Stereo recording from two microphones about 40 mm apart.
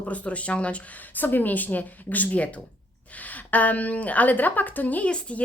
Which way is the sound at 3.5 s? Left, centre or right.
Left.